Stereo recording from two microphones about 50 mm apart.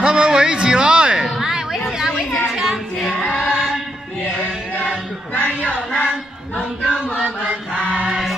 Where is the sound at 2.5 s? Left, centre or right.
Centre.